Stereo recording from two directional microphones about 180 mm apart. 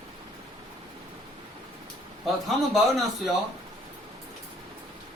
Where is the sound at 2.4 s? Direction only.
Centre (ahead or behind).